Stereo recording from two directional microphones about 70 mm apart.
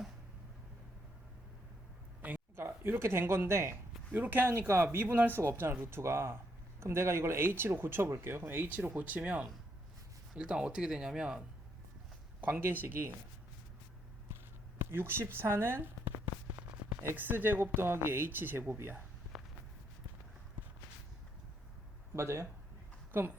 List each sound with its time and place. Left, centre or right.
2.6 s speech: right
4.5 s speech: right
5.4 s speech: right; by 11.4 s centre
12.4 s speech: right
14.8 s a sound: right
17.2 s speech: right
22.1 s speech: right
23.1 s speech: right